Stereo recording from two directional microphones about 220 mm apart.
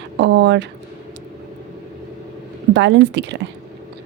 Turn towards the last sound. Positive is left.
turn(degrees=-55)  # may be behind; listen again after turning